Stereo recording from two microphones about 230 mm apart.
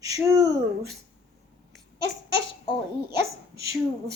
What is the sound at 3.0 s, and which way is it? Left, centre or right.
Speech, centre.